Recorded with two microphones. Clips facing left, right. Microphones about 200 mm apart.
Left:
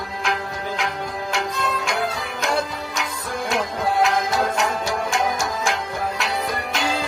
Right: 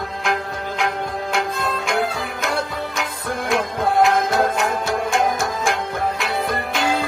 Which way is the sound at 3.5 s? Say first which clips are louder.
Right 3 dB; 55° right (ahead or behind).